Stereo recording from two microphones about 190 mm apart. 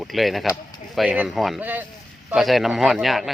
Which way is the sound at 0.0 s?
Centre (ahead or behind).